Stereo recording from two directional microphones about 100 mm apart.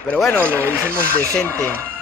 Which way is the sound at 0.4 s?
20° right (ahead or behind).